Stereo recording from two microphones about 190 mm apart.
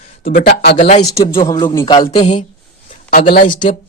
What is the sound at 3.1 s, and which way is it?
Speech, 45° left (ahead or behind).